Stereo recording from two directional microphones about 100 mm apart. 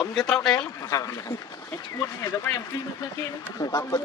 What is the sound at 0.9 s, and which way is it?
Speech, 35° left (ahead or behind).